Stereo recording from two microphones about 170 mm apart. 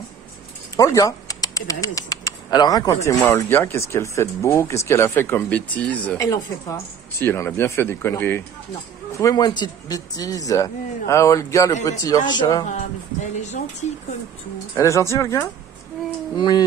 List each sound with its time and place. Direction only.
0.7 s speech: 20° left (ahead or behind)
12.6 s a sound: 45° left (ahead or behind)
14.8 s speech: 15° left (ahead or behind)